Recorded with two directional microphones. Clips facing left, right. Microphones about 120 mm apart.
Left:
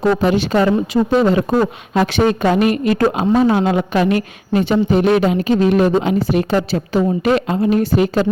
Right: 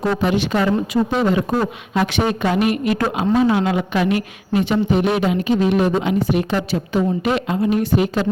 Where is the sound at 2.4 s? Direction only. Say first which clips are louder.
Left 3 dB; 35° left (ahead or behind).